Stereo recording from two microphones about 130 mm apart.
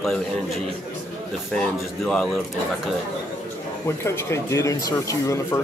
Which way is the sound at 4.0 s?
20° left (ahead or behind).